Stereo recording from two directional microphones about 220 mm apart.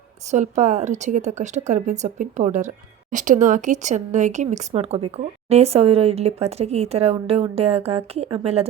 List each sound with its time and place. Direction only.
0.3 s speech: 35° right (ahead or behind)